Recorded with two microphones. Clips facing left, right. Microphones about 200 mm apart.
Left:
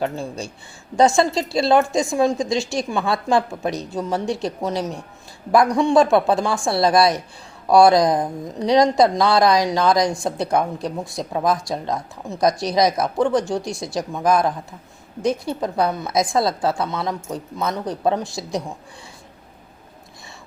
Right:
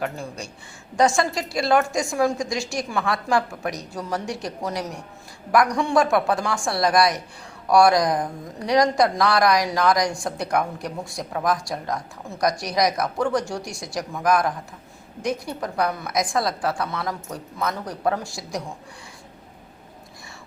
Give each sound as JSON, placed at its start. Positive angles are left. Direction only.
{"t": 0.0, "sound": "speech", "side_deg": 25}